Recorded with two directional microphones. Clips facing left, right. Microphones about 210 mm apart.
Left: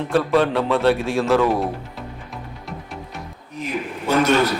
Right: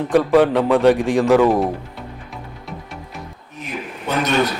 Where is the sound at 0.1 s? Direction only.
15° right (ahead or behind).